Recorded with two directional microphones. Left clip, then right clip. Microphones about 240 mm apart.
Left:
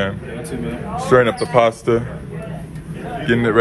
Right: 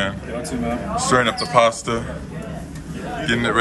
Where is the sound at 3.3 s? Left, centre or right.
Centre.